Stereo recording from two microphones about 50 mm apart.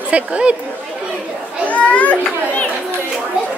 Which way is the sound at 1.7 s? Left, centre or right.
Left.